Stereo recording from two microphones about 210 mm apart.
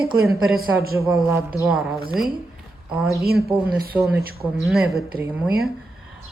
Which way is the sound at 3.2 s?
45° right (ahead or behind).